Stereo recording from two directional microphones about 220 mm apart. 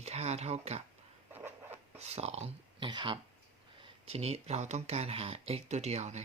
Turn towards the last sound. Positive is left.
turn(degrees=-30)  # may be behind; listen again after turning